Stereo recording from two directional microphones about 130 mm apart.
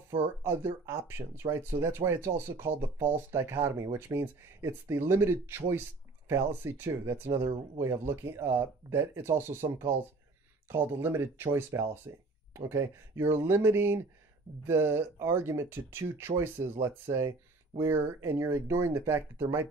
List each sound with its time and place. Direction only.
0.1 s speech: 20° right (ahead or behind)